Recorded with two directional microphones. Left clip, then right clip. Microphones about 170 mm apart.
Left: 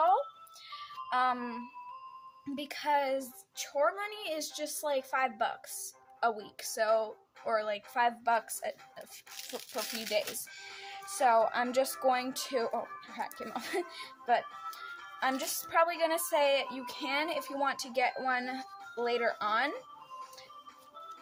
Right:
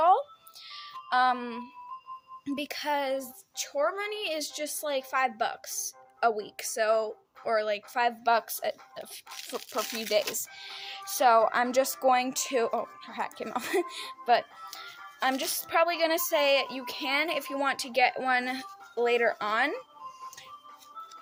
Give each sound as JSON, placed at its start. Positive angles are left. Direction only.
{"t": 1.1, "sound": "music", "side_deg": -50}
{"t": 2.6, "sound": "speech", "side_deg": -55}
{"t": 9.7, "sound": "speech", "side_deg": -20}
{"t": 10.1, "sound": "speech", "side_deg": -55}